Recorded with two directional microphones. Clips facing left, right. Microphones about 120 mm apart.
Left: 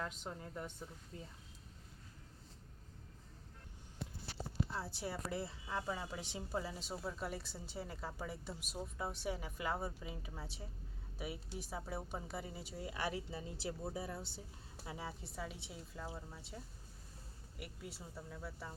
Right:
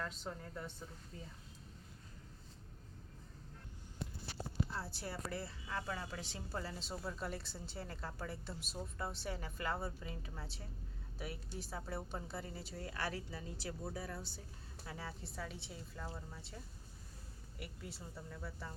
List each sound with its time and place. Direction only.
0.0 s a woman's voice: 15° left (ahead or behind)
4.7 s a woman's voice: 15° left (ahead or behind)